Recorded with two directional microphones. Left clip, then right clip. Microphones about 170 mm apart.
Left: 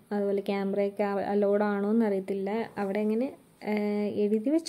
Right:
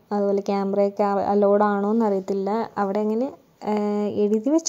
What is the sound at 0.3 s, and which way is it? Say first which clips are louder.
Speech: right 6 dB; 20° right (ahead or behind).